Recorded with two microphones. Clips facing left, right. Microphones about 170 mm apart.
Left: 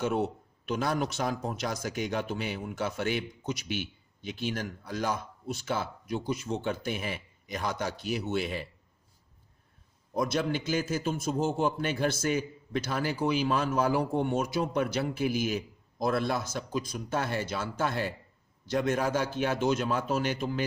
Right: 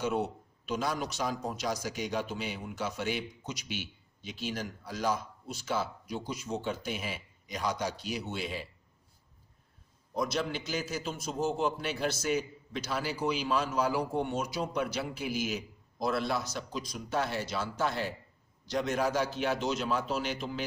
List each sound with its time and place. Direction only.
0.6 s speech: 55° left (ahead or behind)
10.2 s speech: 50° left (ahead or behind)